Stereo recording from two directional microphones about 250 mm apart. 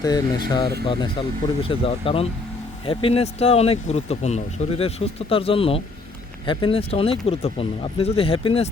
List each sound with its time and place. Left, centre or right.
0.0 s speech: centre